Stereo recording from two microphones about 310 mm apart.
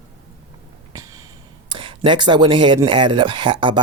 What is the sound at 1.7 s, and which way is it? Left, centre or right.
Speech, centre.